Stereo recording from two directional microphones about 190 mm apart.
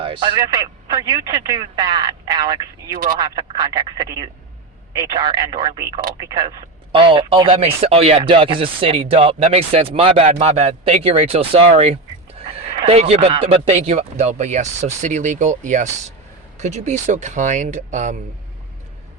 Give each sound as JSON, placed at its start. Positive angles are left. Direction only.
{"t": 0.0, "sound": "speech", "side_deg": -25}